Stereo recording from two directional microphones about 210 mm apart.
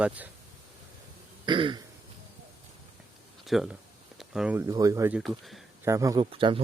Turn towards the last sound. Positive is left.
turn(degrees=-25)  # may be behind; listen again after turning